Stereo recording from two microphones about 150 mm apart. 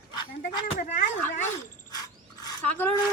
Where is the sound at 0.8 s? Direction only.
60° left (ahead or behind).